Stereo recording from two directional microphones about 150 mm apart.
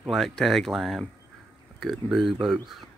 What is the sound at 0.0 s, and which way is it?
Speech, centre (ahead or behind).